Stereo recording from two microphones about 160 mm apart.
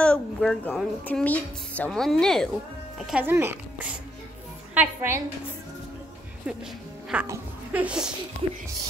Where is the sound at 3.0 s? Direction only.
10° right (ahead or behind).